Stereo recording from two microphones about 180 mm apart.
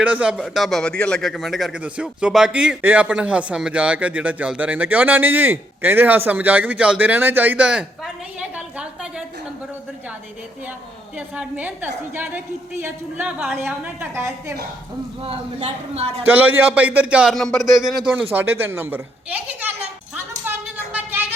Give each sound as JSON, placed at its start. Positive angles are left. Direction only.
{"t": 0.0, "sound": "a man's voice", "side_deg": -5}
{"t": 11.3, "sound": "a man's voice", "side_deg": -10}
{"t": 15.2, "sound": "a man's voice", "side_deg": -35}
{"t": 16.2, "sound": "a man's voice", "side_deg": -10}
{"t": 20.5, "sound": "a sound", "side_deg": -10}